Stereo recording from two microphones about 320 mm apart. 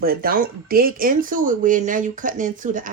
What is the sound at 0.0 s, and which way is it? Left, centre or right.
Dishes, right.